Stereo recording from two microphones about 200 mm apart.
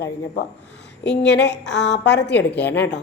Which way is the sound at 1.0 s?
60° left (ahead or behind).